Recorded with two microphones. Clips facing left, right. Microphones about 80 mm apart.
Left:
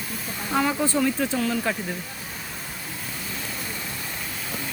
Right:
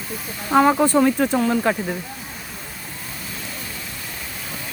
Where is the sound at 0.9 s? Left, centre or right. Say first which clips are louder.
Right 6 dB; right.